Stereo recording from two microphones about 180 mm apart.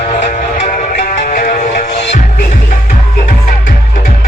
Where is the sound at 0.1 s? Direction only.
45° left (ahead or behind).